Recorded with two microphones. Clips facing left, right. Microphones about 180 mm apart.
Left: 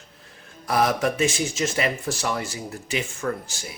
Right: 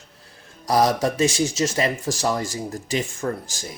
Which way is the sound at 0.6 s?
35° right (ahead or behind).